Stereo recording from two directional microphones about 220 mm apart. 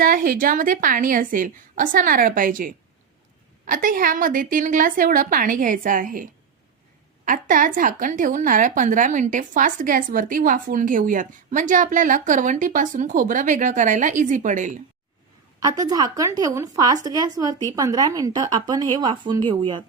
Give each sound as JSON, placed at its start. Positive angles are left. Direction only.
{"t": 0.0, "sound": "a woman's voice", "side_deg": -40}
{"t": 7.3, "sound": "a woman's voice", "side_deg": -35}
{"t": 15.6, "sound": "speech", "side_deg": -15}